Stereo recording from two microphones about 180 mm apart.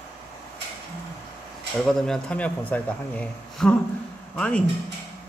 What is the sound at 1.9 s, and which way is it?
Speech, 5° left (ahead or behind).